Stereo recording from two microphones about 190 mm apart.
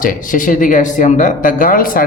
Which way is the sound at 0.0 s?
45° left (ahead or behind).